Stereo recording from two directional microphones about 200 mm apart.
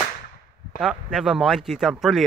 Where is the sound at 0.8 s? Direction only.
5° right (ahead or behind).